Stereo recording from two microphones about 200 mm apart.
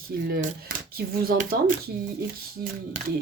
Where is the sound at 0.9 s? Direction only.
50° right (ahead or behind).